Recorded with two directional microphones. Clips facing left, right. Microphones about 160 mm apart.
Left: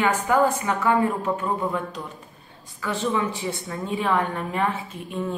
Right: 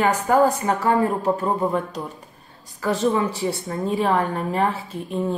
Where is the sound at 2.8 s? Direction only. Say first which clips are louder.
Right 4 dB; 40° right (ahead or behind).